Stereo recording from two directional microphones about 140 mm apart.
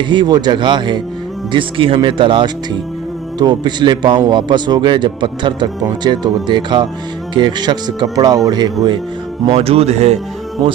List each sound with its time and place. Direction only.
0.0 s speech: 35° right (ahead or behind)
9.5 s speech: 45° right (ahead or behind)